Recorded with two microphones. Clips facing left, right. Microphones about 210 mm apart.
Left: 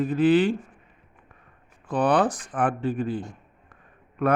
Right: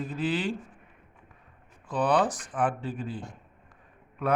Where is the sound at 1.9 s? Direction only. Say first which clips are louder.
Left 3 dB; 55° left (ahead or behind).